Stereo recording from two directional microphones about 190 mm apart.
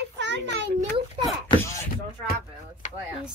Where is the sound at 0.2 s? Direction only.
70° right (ahead or behind).